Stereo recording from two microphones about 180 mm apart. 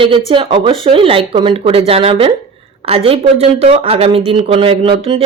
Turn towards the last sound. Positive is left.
turn(degrees=-30)  # may be behind; listen again after turning